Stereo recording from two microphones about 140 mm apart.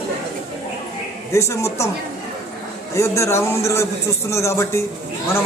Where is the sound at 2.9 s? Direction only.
20° left (ahead or behind).